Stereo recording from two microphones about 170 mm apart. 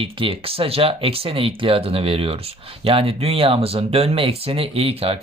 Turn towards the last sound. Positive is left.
turn(degrees=-35)  # may be behind; listen again after turning